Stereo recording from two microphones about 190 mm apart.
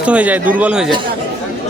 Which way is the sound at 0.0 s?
5° right (ahead or behind).